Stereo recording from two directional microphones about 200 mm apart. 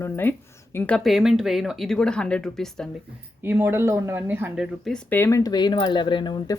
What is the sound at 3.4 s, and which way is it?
Speech, 10° right (ahead or behind).